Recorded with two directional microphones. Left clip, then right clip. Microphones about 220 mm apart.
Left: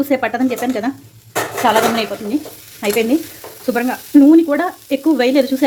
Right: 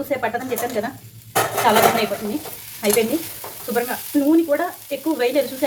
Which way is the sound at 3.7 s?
45° left (ahead or behind).